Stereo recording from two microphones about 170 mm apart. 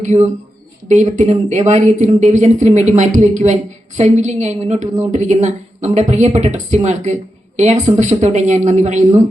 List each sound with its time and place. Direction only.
0.0 s speech: 45° right (ahead or behind)